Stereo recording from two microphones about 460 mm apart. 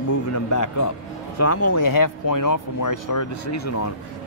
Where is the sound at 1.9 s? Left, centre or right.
Left.